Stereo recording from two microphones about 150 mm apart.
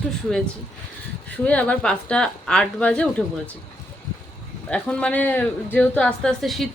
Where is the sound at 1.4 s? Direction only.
10° left (ahead or behind).